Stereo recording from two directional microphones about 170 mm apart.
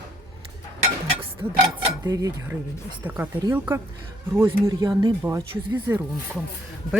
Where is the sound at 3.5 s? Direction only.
10° right (ahead or behind).